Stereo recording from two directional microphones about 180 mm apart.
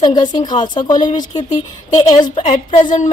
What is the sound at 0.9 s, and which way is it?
Speech, 45° left (ahead or behind).